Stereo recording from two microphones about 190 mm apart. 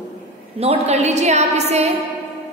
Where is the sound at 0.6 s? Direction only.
35° right (ahead or behind).